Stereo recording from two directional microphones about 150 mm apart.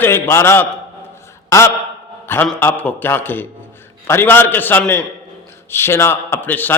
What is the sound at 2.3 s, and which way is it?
A man's voice, 15° left (ahead or behind).